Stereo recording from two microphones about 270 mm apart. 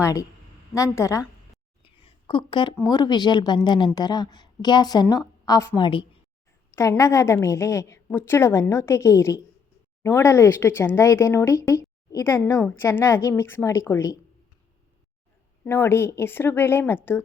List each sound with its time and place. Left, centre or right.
0.0 s speech: centre
15.6 s speech: centre